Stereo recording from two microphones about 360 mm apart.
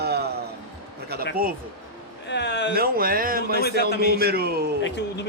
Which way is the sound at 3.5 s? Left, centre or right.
Left.